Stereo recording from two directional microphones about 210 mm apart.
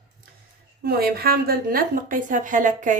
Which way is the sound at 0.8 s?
45° right (ahead or behind).